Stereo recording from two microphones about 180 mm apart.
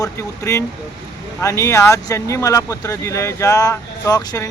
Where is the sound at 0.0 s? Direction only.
15° left (ahead or behind).